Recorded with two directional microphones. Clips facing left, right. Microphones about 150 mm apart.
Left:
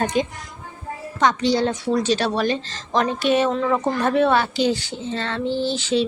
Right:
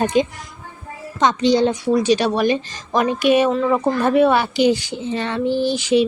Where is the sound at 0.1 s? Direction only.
20° right (ahead or behind).